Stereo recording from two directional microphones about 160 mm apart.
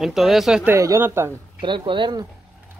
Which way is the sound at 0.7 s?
15° right (ahead or behind).